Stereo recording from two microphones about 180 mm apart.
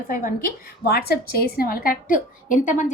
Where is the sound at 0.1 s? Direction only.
50° left (ahead or behind).